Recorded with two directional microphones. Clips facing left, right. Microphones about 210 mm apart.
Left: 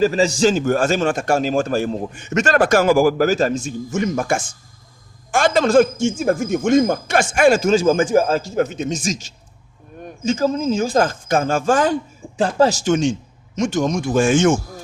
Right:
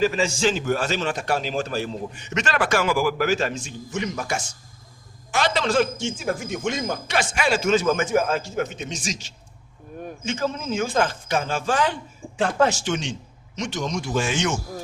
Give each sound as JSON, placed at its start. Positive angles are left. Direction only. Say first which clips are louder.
{"t": 0.0, "sound": "a man's voice", "louder": "left 6 dB", "side_deg": 40}
{"t": 12.4, "sound": "a man's voice", "louder": "left 4 dB", "side_deg": 35}